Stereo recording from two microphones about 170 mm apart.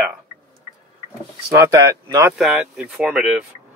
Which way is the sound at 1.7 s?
15° right (ahead or behind).